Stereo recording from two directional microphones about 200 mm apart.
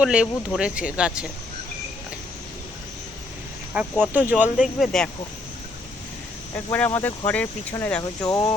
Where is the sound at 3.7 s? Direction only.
5° right (ahead or behind).